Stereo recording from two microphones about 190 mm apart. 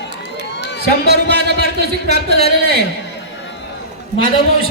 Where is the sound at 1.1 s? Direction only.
60° right (ahead or behind).